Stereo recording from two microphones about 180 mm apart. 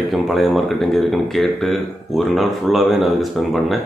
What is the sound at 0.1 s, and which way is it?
A man's voice, centre (ahead or behind).